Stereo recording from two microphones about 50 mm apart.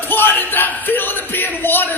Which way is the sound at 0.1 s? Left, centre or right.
Left.